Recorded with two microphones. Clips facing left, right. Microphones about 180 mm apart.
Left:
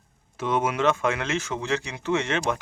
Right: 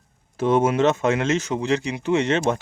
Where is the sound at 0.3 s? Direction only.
30° right (ahead or behind).